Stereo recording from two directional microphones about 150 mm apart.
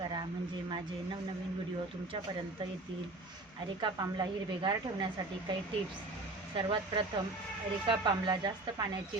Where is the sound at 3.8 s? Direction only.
30° right (ahead or behind).